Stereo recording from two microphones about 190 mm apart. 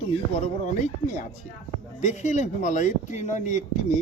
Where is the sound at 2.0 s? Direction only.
40° left (ahead or behind).